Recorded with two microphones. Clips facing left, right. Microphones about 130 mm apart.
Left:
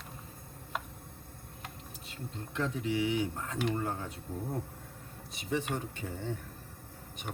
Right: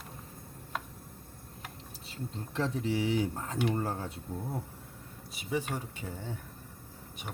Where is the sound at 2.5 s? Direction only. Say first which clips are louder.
Right 1 dB; 35° right (ahead or behind).